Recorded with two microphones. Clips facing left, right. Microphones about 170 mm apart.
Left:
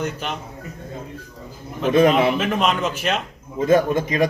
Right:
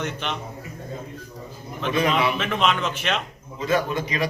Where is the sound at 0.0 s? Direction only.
40° left (ahead or behind).